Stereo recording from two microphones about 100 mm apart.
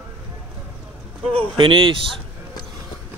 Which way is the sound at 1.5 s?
60° right (ahead or behind).